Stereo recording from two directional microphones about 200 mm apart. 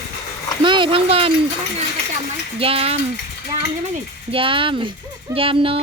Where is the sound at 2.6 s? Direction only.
30° right (ahead or behind).